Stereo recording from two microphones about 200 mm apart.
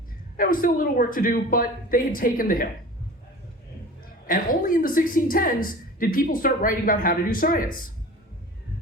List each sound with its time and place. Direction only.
0.3 s a woman's voice: 45° left (ahead or behind)
4.3 s a woman's voice: 45° left (ahead or behind)